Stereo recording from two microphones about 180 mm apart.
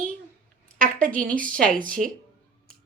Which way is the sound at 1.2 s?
50° right (ahead or behind).